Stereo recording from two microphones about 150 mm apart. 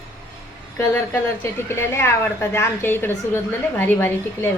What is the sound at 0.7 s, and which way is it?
A woman's voice, 15° left (ahead or behind).